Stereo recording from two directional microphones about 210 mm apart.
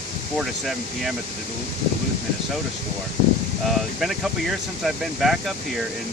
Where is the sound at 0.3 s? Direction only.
Centre (ahead or behind).